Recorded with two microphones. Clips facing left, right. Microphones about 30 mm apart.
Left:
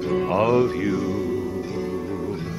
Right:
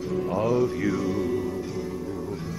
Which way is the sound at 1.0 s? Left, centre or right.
Centre.